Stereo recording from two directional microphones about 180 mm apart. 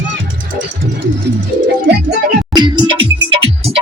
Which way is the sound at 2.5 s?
25° right (ahead or behind).